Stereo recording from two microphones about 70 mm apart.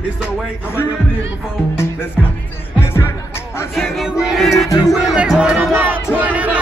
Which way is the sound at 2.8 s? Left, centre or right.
Left.